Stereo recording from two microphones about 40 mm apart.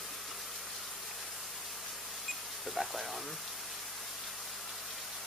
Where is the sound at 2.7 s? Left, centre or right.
Centre.